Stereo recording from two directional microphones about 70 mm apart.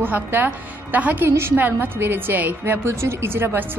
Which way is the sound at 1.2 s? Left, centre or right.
Right.